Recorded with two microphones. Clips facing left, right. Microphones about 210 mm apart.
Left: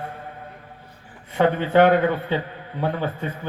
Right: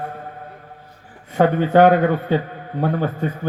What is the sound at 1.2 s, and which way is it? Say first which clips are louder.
Speech: right 3 dB; 40° right (ahead or behind).